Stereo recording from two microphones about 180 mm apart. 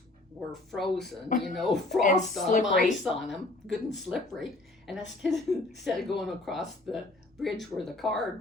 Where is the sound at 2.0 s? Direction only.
45° left (ahead or behind).